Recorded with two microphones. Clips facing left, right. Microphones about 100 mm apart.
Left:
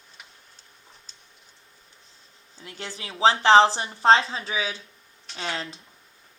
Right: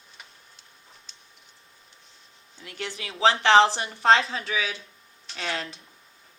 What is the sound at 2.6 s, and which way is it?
A woman's voice, 30° left (ahead or behind).